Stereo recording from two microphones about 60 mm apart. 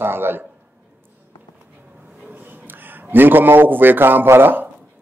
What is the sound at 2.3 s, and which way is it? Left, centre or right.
A man's voice, right.